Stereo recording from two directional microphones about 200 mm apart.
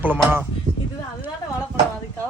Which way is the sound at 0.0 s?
10° right (ahead or behind).